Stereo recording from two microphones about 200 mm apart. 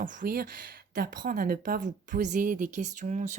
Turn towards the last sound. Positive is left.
turn(degrees=-35)  # may be behind; listen again after turning